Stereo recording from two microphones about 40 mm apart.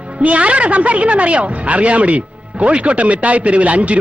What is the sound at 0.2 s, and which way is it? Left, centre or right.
A woman's voice, right.